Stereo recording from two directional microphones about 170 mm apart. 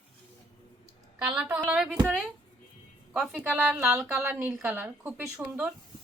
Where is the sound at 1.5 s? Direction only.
10° right (ahead or behind).